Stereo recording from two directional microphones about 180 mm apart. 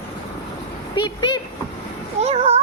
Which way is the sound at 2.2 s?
35° right (ahead or behind).